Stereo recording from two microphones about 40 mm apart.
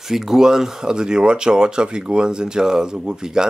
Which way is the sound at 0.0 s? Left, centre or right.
Centre.